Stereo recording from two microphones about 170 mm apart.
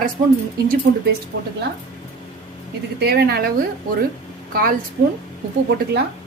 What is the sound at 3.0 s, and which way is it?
Speech, 65° right (ahead or behind).